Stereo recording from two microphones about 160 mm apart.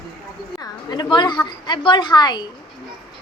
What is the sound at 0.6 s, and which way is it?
A woman's voice, 25° left (ahead or behind).